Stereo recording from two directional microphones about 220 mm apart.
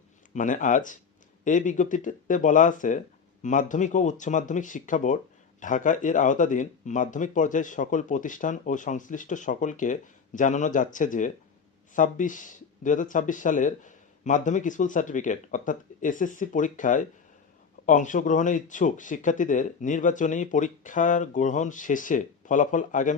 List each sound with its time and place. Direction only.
0.3 s speech: 35° left (ahead or behind)